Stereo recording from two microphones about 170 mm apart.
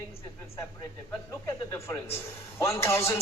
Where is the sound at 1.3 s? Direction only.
20° left (ahead or behind).